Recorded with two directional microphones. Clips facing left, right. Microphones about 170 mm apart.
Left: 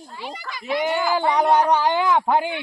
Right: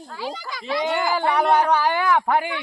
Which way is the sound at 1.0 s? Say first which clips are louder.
Left 1 dB; 15° right (ahead or behind).